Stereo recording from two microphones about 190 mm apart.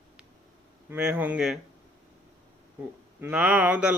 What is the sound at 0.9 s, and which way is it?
Speech, 10° right (ahead or behind).